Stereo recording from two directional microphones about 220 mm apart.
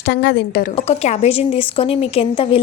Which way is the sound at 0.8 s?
30° left (ahead or behind).